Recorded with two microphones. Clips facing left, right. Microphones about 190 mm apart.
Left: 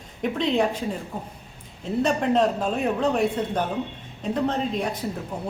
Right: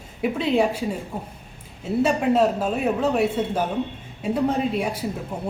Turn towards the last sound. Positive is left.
turn(degrees=-10)  # may be behind; listen again after turning